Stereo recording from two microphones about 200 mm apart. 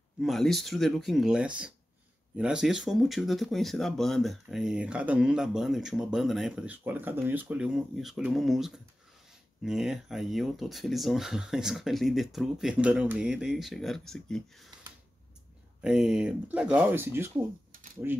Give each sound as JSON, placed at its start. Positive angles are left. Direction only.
{"t": 0.2, "sound": "speech", "side_deg": 0}
{"t": 15.8, "sound": "speech", "side_deg": -5}